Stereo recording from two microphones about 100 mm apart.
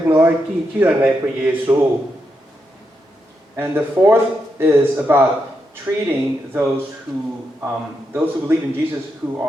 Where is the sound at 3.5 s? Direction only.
25° right (ahead or behind).